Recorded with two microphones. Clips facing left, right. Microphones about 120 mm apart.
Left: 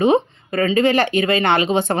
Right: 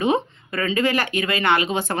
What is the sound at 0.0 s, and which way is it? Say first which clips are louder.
Speech: left 5 dB; 25° left (ahead or behind).